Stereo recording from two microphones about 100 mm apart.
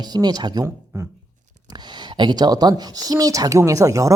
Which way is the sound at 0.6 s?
25° right (ahead or behind).